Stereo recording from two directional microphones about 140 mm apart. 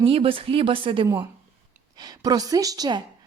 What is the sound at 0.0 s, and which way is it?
A woman's voice, 40° right (ahead or behind).